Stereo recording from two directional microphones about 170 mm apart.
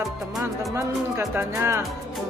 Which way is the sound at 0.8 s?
15° right (ahead or behind).